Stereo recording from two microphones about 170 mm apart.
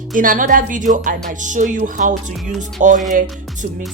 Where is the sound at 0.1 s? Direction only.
55° right (ahead or behind).